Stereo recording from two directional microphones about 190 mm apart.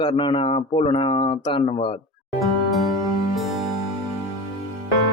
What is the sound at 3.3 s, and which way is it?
Music, centre (ahead or behind).